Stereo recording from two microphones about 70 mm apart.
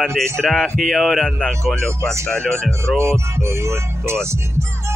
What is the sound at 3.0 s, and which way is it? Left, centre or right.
Music, right.